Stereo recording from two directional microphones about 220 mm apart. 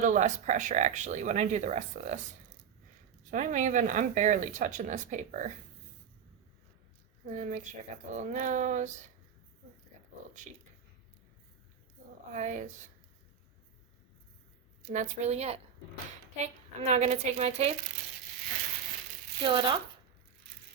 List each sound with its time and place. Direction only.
0.0 s speech: 35° right (ahead or behind)
3.3 s speech: 35° right (ahead or behind)
7.3 s speech: 35° right (ahead or behind)
12.3 s speech: 35° right (ahead or behind)
14.9 s speech: 35° right (ahead or behind)
19.4 s speech: 20° right (ahead or behind)